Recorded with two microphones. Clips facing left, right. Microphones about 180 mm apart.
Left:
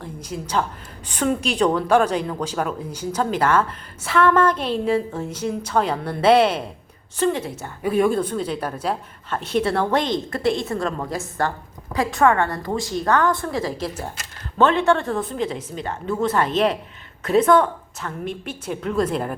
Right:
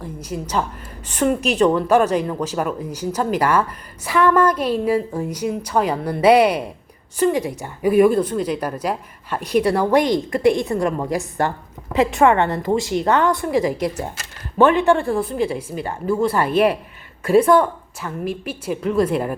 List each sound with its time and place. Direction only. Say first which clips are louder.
0.0 s a woman's voice: right 3 dB; 10° right (ahead or behind)